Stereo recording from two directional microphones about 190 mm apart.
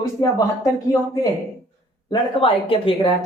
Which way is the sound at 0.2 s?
20° left (ahead or behind).